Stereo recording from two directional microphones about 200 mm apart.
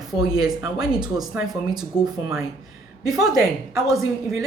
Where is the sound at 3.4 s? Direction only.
15° right (ahead or behind).